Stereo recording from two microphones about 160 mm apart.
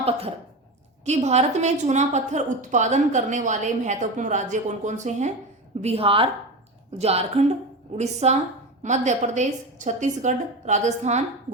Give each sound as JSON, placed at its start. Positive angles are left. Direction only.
{"t": 1.0, "sound": "a woman's voice", "side_deg": -45}